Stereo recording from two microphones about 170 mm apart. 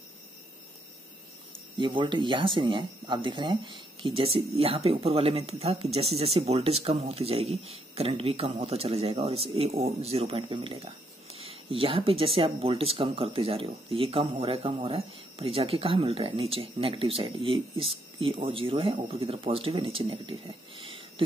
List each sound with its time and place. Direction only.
1.8 s speech: 30° right (ahead or behind)